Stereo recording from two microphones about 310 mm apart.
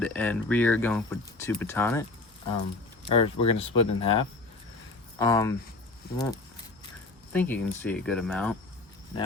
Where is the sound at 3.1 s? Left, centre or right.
Centre.